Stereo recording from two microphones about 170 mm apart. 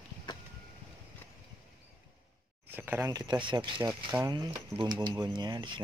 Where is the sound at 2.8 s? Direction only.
10° right (ahead or behind).